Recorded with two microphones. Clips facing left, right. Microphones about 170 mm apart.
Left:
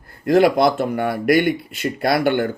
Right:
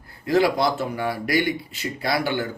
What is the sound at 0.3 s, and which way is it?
Speech, 55° left (ahead or behind).